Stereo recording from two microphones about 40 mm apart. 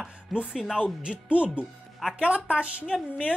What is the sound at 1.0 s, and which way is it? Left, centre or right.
Speech, right.